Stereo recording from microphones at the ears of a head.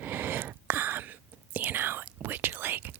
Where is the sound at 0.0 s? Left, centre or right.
Right.